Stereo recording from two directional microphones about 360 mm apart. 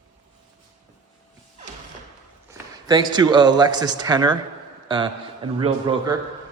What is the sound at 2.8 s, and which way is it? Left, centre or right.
A man's voice, centre.